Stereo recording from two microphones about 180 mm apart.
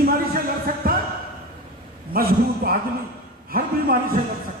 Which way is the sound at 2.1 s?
55° right (ahead or behind).